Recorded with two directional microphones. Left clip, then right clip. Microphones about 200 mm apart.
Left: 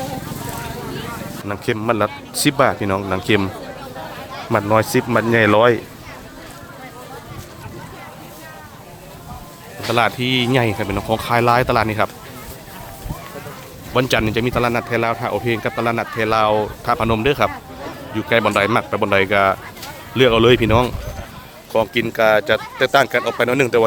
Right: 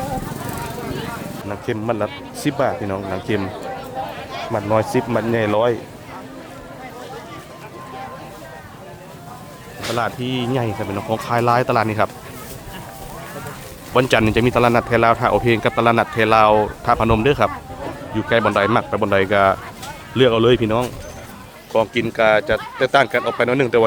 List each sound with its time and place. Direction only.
1.5 s speech: 10° left (ahead or behind)
4.7 s speech: 5° left (ahead or behind)
9.9 s speech: 20° left (ahead or behind); by 12.1 s centre (ahead or behind)
13.9 s speech: 5° right (ahead or behind); by 23.8 s 10° left (ahead or behind)